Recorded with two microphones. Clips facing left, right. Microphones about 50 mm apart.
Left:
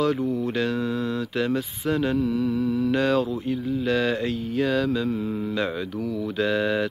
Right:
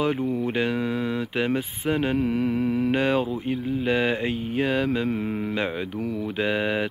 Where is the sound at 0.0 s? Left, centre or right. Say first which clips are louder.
Left 1 dB; right.